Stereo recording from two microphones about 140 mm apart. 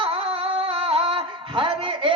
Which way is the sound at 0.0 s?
45° right (ahead or behind).